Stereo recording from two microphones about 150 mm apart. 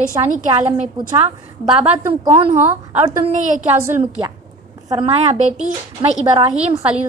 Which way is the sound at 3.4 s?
55° right (ahead or behind).